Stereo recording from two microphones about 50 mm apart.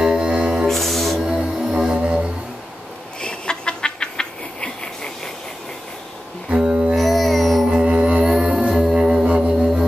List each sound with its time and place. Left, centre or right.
0.0 s music: centre
0.7 s music: centre
1.2 s music: centre
3.2 s a sound: centre
6.5 s mantra: centre
7.0 s a sound: centre
7.6 s music: centre